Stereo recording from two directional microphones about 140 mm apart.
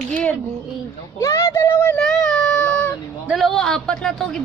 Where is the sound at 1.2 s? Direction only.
20° left (ahead or behind).